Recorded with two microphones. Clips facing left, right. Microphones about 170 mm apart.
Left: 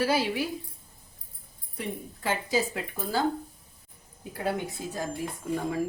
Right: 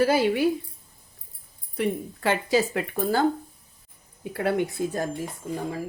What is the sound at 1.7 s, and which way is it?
Speech, 70° right (ahead or behind).